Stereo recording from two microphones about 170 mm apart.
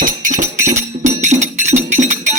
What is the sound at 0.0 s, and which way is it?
Music, 50° right (ahead or behind).